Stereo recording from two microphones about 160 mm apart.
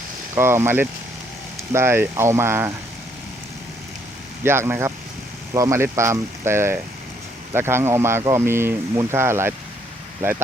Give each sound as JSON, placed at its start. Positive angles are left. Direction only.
{"t": 0.3, "sound": "speech", "side_deg": -15}
{"t": 4.4, "sound": "speech", "side_deg": -15}